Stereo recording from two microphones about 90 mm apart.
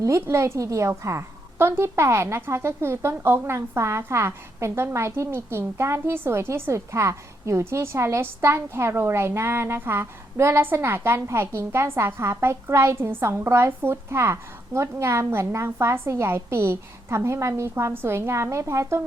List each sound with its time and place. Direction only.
0.0 s a woman's voice: 35° right (ahead or behind)